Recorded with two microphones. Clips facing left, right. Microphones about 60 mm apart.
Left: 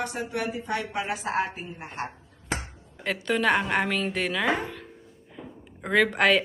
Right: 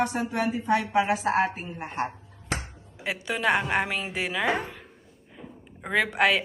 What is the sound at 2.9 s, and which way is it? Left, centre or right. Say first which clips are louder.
A woman's voice: left 4 dB; centre.